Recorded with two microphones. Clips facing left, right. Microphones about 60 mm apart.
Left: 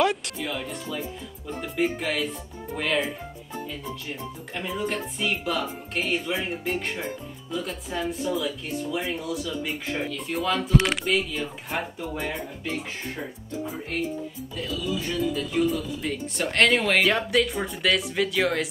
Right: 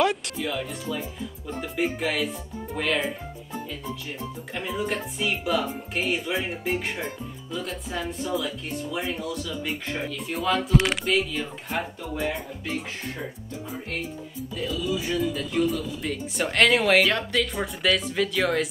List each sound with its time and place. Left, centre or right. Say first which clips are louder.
0.0 s speech: even; centre
4.6 s speech: even; centre
14.6 s speech: right 1 dB; centre
17.1 s speech: left 2 dB; centre
17.6 s speech: even; centre